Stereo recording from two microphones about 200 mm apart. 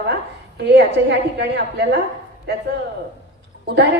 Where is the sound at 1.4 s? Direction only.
55° right (ahead or behind).